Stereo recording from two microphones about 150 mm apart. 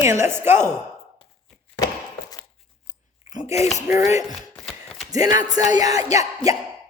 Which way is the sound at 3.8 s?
20° right (ahead or behind).